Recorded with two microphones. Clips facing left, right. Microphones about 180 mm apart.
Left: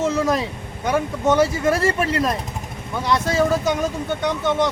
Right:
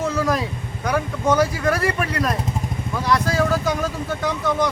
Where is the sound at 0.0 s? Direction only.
20° left (ahead or behind).